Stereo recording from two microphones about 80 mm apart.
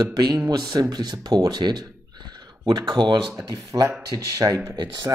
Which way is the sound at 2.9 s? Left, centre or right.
Right.